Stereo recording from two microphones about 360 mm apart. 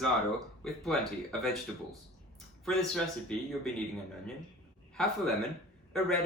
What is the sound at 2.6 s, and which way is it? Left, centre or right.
Speech, centre.